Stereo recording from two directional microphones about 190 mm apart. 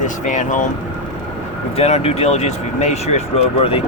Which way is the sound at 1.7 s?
35° left (ahead or behind).